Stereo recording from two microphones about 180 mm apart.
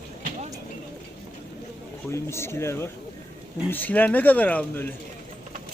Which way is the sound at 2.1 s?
15° left (ahead or behind).